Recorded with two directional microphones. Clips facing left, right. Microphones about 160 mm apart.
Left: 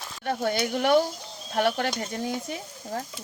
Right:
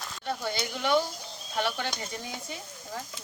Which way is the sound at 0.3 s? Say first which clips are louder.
Left 6 dB; 55° left (ahead or behind).